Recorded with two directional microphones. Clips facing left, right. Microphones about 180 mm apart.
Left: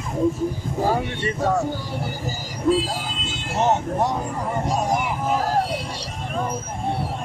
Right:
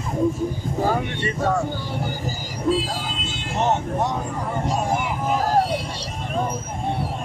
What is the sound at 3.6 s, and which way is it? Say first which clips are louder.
Speech: left 1 dB; 5° left (ahead or behind).